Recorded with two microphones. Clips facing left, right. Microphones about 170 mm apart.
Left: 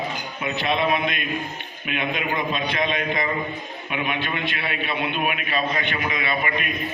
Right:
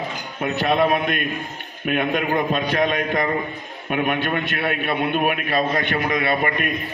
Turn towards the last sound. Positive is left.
turn(degrees=-45)  # may be behind; listen again after turning